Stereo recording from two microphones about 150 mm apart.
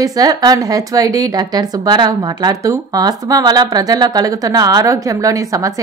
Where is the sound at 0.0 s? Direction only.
25° right (ahead or behind).